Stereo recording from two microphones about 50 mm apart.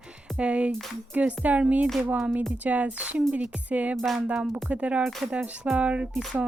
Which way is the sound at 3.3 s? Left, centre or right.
Right.